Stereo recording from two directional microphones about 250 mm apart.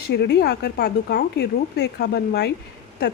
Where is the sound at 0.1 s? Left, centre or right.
Left.